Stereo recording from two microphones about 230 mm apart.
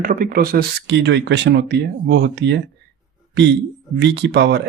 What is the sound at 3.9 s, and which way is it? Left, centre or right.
Speech, right.